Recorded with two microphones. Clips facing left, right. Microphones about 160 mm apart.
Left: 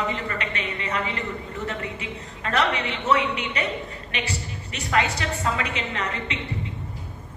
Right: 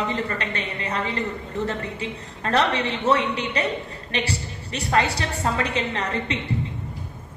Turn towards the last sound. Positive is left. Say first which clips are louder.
# right 3 dB
turn(degrees=-35)  # may be behind; listen again after turning